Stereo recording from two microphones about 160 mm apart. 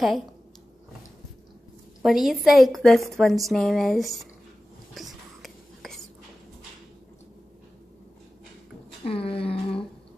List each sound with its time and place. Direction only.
2.0 s a woman's voice: centre (ahead or behind)
4.9 s whispering: centre (ahead or behind)
9.0 s a sound: 35° left (ahead or behind)